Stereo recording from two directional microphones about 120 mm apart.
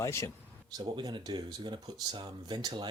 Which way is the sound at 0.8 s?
40° right (ahead or behind).